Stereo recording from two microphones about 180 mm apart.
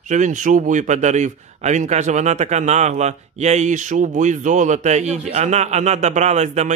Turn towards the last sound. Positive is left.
turn(degrees=-40)  # may be behind; listen again after turning